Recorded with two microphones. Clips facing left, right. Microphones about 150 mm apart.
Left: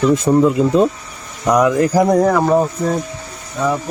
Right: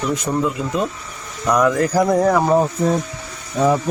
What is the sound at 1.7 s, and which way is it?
Speech, 5° left (ahead or behind).